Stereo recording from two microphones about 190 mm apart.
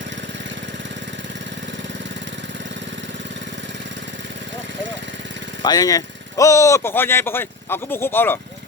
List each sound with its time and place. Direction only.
5.6 s speech: 20° left (ahead or behind)